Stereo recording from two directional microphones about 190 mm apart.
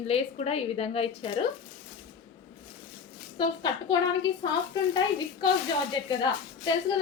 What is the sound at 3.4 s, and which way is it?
A woman's voice, 25° left (ahead or behind).